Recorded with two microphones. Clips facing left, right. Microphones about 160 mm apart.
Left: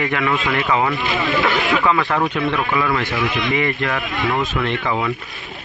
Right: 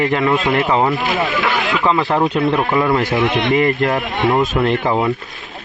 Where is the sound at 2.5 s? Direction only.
40° right (ahead or behind).